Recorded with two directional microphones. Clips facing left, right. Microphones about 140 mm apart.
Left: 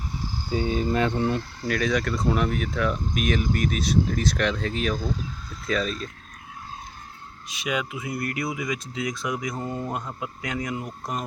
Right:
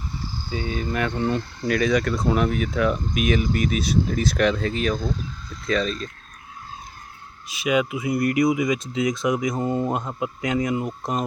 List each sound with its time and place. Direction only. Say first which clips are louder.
0.5 s speech: left 3 dB; 35° left (ahead or behind)
1.1 s speech: right 1 dB; 5° left (ahead or behind)
7.4 s speech: right 7 dB; 5° right (ahead or behind); by 11.3 s 25° right (ahead or behind)